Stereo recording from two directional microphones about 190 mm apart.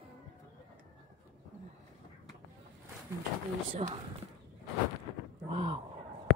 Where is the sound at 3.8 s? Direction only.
30° right (ahead or behind).